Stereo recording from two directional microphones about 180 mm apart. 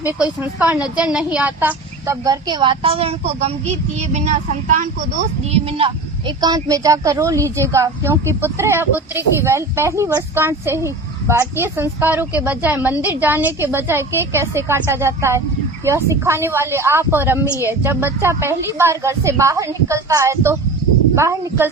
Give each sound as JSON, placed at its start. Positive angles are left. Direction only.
{"t": 0.0, "sound": "a woman's voice", "side_deg": -10}
{"t": 5.5, "sound": "a woman's voice", "side_deg": -35}